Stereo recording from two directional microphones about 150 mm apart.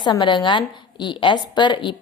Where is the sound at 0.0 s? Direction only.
30° left (ahead or behind).